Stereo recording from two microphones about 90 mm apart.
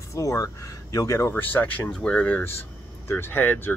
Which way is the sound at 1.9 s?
10° left (ahead or behind).